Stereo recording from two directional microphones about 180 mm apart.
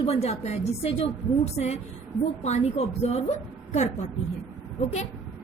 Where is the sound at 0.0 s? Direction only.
35° left (ahead or behind).